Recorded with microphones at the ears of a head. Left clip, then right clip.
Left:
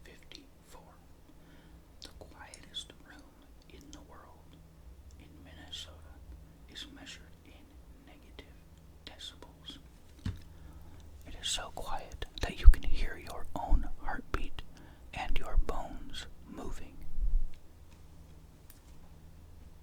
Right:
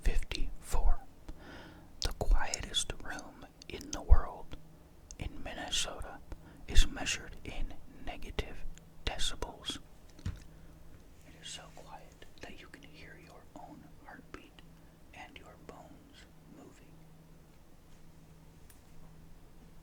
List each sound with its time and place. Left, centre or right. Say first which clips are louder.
0.0 s whispering: right 11 dB; right
11.3 s whispering: left 11 dB; left